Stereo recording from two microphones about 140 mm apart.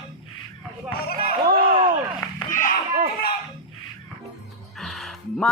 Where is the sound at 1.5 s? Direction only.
40° right (ahead or behind).